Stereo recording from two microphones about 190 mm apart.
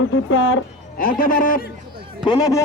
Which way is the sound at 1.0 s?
45° left (ahead or behind).